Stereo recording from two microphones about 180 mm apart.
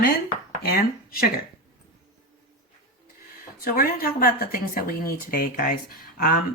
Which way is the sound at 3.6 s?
55° left (ahead or behind).